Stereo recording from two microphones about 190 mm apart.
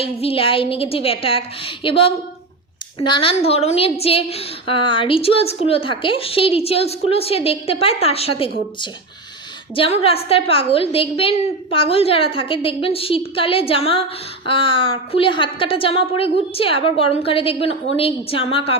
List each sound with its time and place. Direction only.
0.0 s a woman's voice: 30° left (ahead or behind)
9.7 s a woman's voice: 30° left (ahead or behind)